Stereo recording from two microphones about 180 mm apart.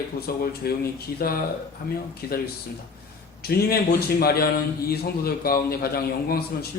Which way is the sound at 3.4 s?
60° left (ahead or behind).